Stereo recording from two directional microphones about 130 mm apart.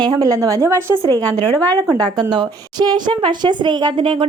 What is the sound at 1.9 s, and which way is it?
A woman's voice, 30° right (ahead or behind).